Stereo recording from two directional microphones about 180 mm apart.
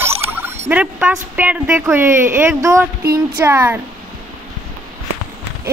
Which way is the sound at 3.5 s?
15° right (ahead or behind).